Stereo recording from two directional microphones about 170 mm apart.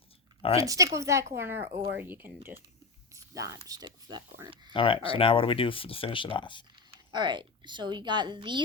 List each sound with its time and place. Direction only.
0.6 s speech: 20° right (ahead or behind)
4.7 s speech: 30° left (ahead or behind)
7.1 s speech: 25° right (ahead or behind)